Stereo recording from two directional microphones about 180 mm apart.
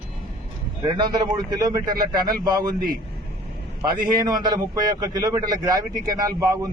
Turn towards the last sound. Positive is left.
turn(degrees=-20)  # may be behind; listen again after turning